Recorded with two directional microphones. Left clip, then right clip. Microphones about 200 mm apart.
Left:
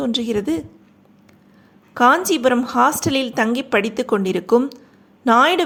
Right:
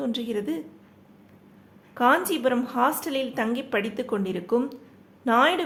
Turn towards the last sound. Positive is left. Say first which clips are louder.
# left 7 dB
turn(degrees=30)  # may be behind; listen again after turning